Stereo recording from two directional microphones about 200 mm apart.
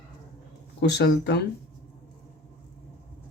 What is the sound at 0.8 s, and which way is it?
Speech, 60° left (ahead or behind).